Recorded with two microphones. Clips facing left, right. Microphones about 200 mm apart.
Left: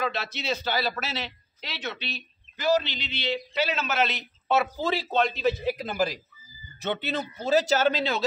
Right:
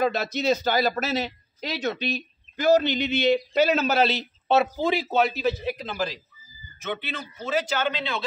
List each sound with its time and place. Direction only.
0.0 s speech: 45° right (ahead or behind); by 5.8 s 10° right (ahead or behind)
5.9 s speech: 10° left (ahead or behind)
6.8 s a man's voice: 35° left (ahead or behind)